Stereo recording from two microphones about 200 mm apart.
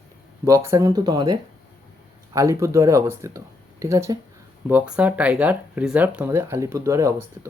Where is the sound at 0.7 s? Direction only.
15° right (ahead or behind).